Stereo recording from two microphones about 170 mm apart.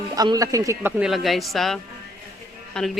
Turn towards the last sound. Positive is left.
turn(degrees=0)  # may be behind; listen again after turning